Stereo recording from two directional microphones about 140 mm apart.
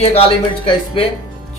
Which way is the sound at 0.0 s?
45° left (ahead or behind).